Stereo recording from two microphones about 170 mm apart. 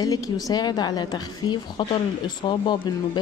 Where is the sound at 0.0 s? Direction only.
20° left (ahead or behind).